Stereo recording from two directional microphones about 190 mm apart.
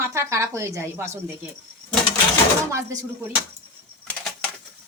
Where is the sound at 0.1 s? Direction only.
15° right (ahead or behind).